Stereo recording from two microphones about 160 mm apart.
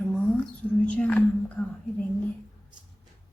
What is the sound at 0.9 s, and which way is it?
Whispering, 10° left (ahead or behind).